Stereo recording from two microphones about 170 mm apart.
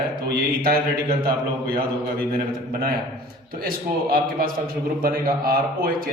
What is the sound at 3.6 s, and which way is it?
A man's voice, 60° right (ahead or behind).